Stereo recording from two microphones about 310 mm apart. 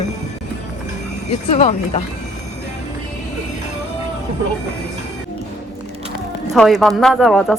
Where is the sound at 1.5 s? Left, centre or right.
Centre.